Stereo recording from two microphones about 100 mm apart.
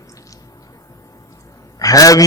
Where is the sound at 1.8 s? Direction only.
35° left (ahead or behind).